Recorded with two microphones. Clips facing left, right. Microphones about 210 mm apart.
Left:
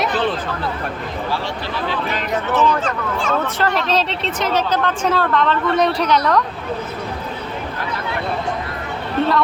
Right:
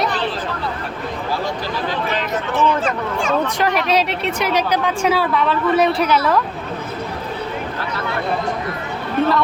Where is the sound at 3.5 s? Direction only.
15° right (ahead or behind).